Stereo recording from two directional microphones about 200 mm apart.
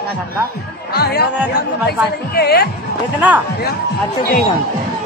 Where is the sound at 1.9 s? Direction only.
50° left (ahead or behind).